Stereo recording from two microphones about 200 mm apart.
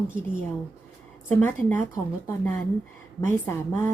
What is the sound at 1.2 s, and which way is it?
Speech, 10° left (ahead or behind).